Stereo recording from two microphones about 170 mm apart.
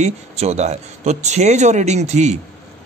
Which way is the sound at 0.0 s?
40° right (ahead or behind).